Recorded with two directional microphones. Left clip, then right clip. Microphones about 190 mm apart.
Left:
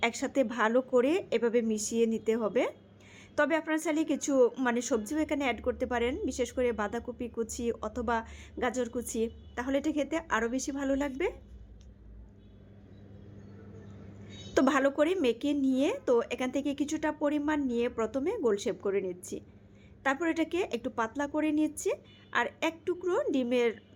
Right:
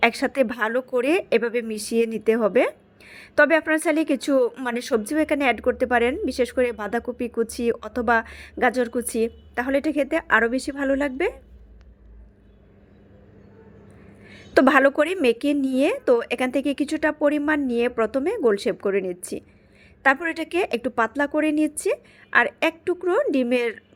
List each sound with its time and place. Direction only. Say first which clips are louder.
0.0 s a woman's voice: right 9 dB; 30° right (ahead or behind)
14.3 s a woman's voice: right 10 dB; 30° right (ahead or behind)